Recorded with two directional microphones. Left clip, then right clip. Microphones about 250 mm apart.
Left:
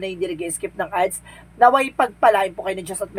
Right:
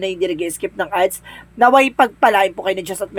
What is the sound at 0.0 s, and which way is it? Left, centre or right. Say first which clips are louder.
A woman's voice: right 6 dB; right.